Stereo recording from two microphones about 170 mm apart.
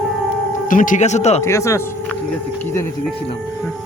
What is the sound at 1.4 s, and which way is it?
Speech, 15° left (ahead or behind).